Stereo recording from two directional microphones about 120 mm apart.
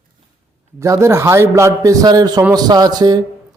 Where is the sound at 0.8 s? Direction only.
25° right (ahead or behind).